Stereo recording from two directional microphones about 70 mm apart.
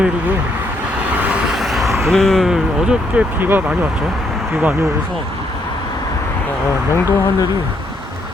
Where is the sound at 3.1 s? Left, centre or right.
Right.